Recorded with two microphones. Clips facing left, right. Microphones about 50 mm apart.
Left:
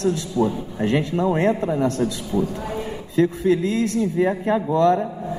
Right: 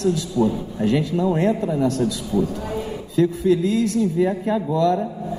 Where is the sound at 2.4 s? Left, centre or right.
Centre.